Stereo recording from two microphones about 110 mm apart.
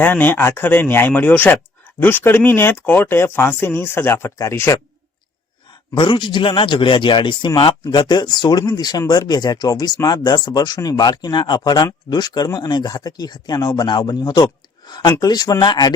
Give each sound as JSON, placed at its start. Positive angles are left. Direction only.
{"t": 0.0, "sound": "speech", "side_deg": 15}
{"t": 5.9, "sound": "a man's voice", "side_deg": 45}